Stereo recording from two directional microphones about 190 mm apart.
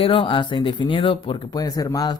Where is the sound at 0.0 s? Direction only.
25° left (ahead or behind).